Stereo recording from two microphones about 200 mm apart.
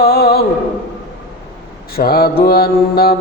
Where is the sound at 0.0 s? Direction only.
50° left (ahead or behind).